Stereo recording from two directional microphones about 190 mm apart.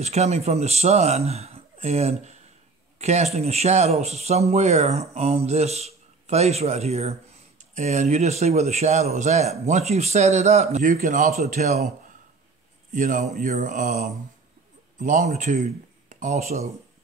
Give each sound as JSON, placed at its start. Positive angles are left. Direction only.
{"t": 0.0, "sound": "a man's voice", "side_deg": -35}
{"t": 12.9, "sound": "a man's voice", "side_deg": -45}